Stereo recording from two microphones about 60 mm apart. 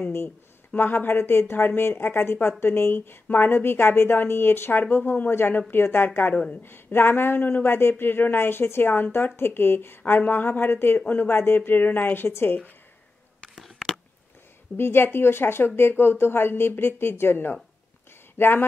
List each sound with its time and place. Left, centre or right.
0.7 s speech: left
12.3 s speech: left
14.8 s speech: left